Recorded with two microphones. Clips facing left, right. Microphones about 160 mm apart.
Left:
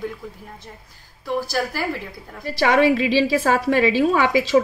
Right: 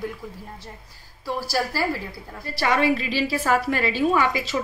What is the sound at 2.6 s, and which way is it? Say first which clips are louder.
A woman's voice: left 5 dB; 85° left.